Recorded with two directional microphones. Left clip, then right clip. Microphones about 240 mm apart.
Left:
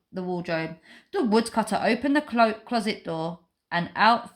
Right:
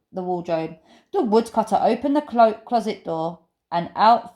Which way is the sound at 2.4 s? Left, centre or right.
Left.